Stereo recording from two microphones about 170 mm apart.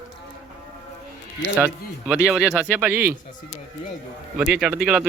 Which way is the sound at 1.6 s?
5° right (ahead or behind).